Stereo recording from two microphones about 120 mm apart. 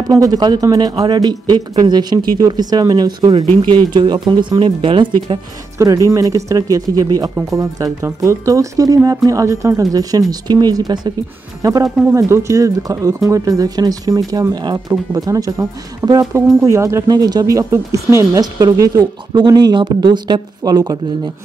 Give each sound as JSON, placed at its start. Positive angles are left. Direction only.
{"t": 0.1, "sound": "speech", "side_deg": -30}
{"t": 6.0, "sound": "speech", "side_deg": -25}